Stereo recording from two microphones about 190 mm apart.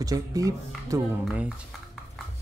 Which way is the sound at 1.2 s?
5° right (ahead or behind).